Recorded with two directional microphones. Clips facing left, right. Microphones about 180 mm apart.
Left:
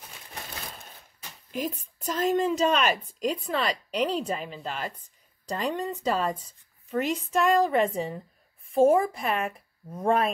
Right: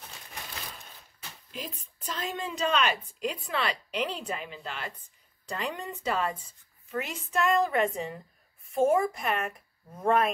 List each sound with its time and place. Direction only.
1.5 s a woman's voice: 45° left (ahead or behind)
7.0 s speech: centre (ahead or behind)
7.6 s a woman's voice: 30° left (ahead or behind)